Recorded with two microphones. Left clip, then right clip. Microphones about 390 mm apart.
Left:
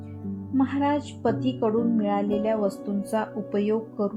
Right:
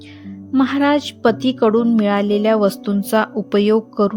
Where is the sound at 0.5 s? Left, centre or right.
Right.